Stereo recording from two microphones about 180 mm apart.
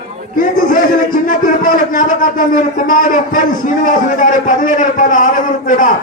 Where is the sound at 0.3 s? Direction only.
45° left (ahead or behind).